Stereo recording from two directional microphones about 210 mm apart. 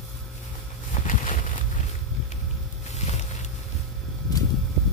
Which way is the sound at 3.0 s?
30° left (ahead or behind).